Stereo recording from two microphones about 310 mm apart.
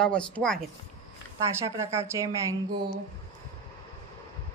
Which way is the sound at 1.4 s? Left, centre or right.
Centre.